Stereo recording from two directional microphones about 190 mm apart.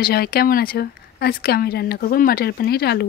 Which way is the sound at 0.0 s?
55° left (ahead or behind).